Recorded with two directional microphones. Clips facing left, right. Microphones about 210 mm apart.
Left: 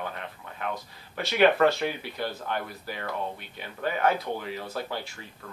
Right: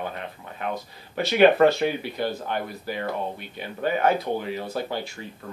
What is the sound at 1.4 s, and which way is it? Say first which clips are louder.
Speech: right 4 dB; 25° right (ahead or behind).